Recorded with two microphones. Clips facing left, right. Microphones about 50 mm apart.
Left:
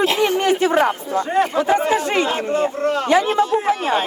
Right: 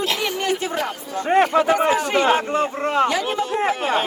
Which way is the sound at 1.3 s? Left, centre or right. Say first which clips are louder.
Right 3 dB; right.